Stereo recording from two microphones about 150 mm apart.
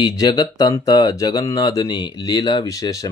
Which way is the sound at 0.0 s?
30° left (ahead or behind).